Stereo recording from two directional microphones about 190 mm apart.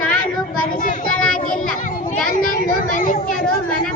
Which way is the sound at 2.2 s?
50° left (ahead or behind).